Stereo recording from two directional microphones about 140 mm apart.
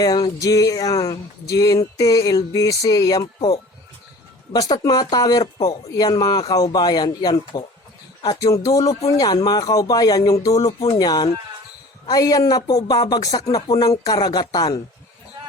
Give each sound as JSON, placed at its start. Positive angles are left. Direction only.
{"t": 0.0, "sound": "speech", "side_deg": 25}